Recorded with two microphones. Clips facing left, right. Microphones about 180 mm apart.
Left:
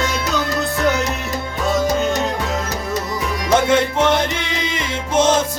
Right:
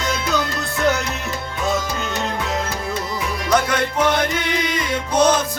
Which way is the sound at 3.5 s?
25° left (ahead or behind).